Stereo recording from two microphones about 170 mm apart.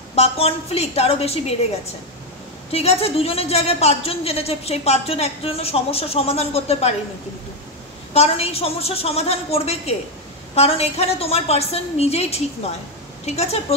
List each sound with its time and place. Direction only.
0.1 s a woman's voice: 35° left (ahead or behind)
2.7 s a woman's voice: 35° left (ahead or behind)
8.1 s a woman's voice: 35° left (ahead or behind)